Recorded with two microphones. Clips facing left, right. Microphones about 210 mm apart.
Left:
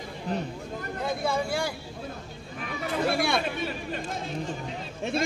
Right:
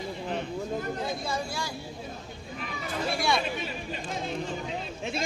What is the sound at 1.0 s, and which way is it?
Speech, 60° left (ahead or behind).